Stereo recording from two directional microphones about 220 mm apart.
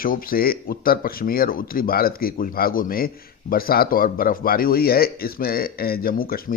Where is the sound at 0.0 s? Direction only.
40° left (ahead or behind).